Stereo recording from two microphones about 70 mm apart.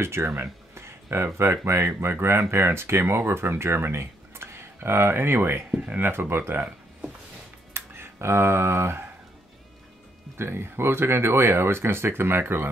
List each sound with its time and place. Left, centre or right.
0.0 s speech: right
5.7 s speech: right
7.7 s a sound: right
10.3 s speech: right